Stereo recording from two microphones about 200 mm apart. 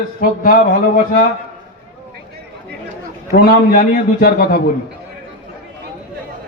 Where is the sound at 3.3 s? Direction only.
45° left (ahead or behind).